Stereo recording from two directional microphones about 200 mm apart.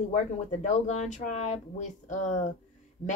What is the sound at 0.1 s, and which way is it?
A woman's voice, 35° left (ahead or behind).